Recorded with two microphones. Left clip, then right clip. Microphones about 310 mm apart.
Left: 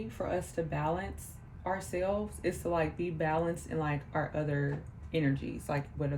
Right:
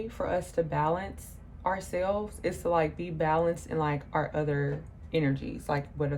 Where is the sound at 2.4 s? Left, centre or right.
Centre.